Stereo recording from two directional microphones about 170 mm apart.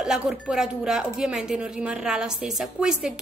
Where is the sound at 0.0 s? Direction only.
5° right (ahead or behind).